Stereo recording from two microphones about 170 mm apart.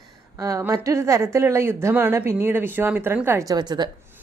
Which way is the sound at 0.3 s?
20° right (ahead or behind).